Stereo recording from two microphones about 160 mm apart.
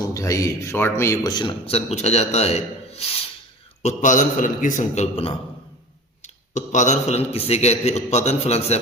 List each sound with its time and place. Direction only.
0.1 s a man's voice: 20° left (ahead or behind); by 3.1 s 40° left (ahead or behind)
3.8 s a man's voice: 50° left (ahead or behind)